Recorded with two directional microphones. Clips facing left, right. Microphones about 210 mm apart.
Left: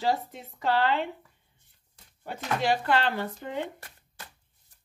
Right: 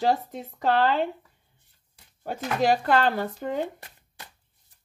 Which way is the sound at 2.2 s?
45° right (ahead or behind).